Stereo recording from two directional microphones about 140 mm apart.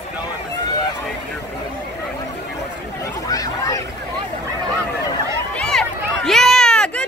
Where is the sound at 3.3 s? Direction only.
25° left (ahead or behind).